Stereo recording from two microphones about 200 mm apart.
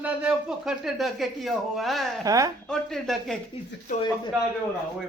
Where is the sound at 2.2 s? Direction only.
15° right (ahead or behind).